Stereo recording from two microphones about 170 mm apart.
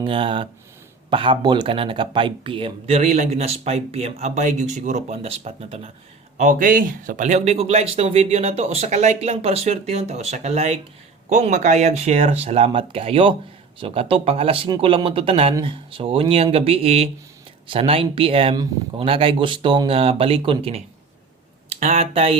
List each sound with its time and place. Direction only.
0.0 s speech: 30° right (ahead or behind)
6.3 s speech: 50° right (ahead or behind)